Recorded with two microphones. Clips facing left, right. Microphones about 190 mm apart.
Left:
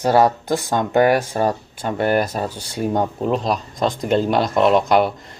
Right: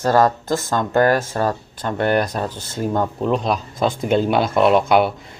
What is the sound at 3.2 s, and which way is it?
Speech, centre (ahead or behind).